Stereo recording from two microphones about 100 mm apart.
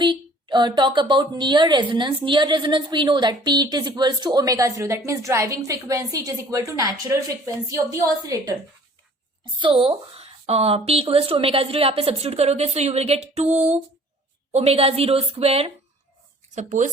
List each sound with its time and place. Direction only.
0.0 s a woman's voice: 50° right (ahead or behind); by 8.5 s 35° right (ahead or behind)
9.4 s a woman's voice: 55° right (ahead or behind); by 15.7 s 80° right